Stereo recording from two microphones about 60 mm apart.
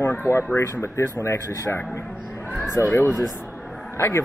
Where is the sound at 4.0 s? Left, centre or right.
Left.